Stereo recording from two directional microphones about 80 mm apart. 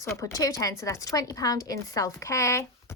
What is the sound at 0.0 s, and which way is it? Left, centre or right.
A woman's voice, left.